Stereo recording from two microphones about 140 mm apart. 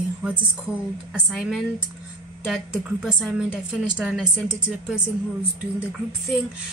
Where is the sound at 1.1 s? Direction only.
5° right (ahead or behind).